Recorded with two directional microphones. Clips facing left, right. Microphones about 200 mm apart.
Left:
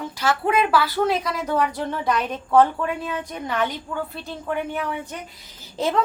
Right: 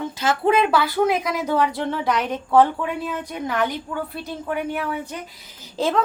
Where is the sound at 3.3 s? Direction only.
10° right (ahead or behind).